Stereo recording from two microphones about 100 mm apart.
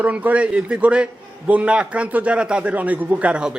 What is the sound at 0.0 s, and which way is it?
A man's voice, 15° right (ahead or behind).